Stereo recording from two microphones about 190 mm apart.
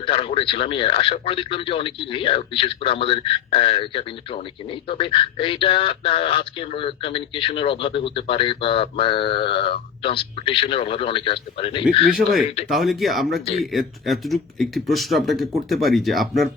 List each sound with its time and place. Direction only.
0.0 s speech: 30° left (ahead or behind)
12.7 s speech: centre (ahead or behind)